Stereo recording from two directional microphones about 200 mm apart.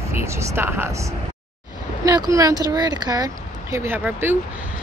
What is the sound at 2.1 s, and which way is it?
Speech, 15° right (ahead or behind).